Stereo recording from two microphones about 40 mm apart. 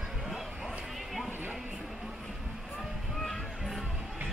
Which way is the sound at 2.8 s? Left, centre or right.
Centre.